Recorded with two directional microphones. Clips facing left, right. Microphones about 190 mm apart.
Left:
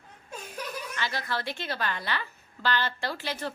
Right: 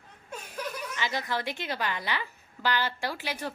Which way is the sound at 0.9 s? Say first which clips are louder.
Right 1 dB; 15° right (ahead or behind).